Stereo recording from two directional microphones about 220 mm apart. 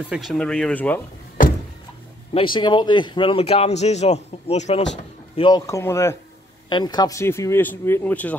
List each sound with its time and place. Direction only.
0.1 s speech: centre (ahead or behind)
2.3 s speech: 20° left (ahead or behind)